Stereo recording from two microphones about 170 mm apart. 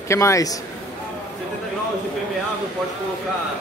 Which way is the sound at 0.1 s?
15° left (ahead or behind).